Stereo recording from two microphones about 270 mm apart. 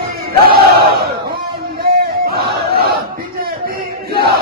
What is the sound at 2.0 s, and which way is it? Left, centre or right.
Battle cry, right.